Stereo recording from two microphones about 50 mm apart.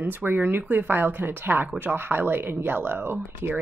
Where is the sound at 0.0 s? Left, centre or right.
Right.